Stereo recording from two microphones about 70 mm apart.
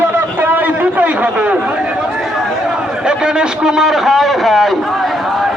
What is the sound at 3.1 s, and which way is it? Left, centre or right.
A man's voice, centre.